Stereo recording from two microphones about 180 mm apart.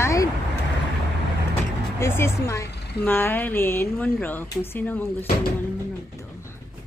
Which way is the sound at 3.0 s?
10° left (ahead or behind).